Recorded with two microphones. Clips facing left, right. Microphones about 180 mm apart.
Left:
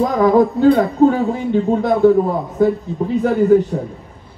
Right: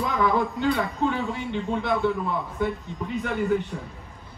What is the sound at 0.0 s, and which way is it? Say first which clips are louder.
Speech: left 11 dB; 40° left (ahead or behind).